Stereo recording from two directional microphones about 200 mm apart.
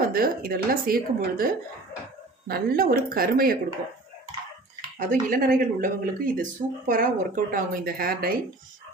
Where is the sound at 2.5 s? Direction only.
50° right (ahead or behind).